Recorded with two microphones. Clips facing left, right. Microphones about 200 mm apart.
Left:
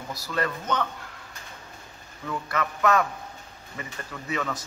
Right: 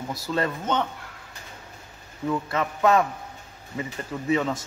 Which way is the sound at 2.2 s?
25° right (ahead or behind).